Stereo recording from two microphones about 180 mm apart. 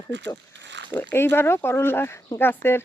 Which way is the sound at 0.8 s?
90° right.